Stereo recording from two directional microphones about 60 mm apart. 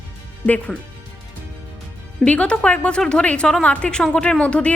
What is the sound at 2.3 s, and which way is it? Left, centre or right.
A woman's voice, left.